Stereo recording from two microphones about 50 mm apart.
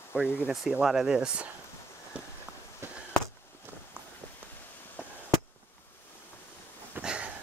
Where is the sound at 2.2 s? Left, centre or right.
Right.